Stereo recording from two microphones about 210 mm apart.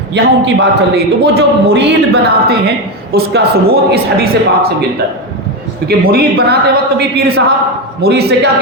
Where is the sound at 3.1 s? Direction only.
50° right (ahead or behind).